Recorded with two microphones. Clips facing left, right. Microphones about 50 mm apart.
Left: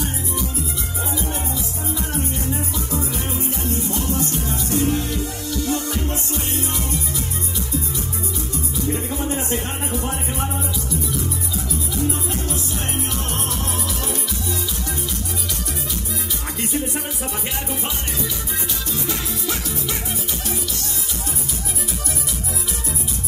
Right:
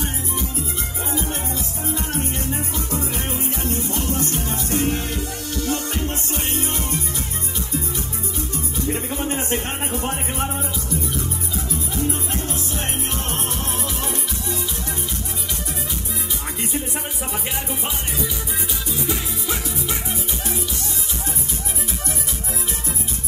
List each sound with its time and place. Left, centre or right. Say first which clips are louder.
3.7 s music: left 1 dB; right
8.8 s music: left 1 dB; right
13.3 s music: left 1 dB; right
16.7 s music: left 2 dB; centre
19.0 s music: even; centre